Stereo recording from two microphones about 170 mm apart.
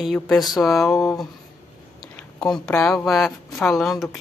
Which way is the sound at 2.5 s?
5° left (ahead or behind).